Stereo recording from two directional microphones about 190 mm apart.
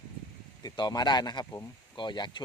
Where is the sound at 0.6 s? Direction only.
20° left (ahead or behind).